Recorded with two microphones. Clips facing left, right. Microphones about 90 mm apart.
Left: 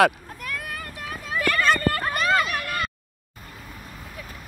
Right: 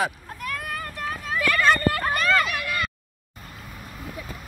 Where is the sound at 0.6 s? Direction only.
35° right (ahead or behind).